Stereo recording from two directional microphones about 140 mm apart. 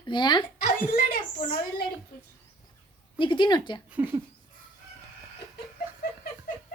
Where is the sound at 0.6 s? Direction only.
70° left (ahead or behind).